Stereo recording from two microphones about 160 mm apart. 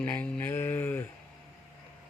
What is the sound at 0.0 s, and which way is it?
Mantra, 10° left (ahead or behind).